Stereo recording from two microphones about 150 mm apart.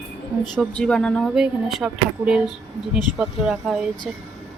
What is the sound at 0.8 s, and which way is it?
Speech, 5° left (ahead or behind).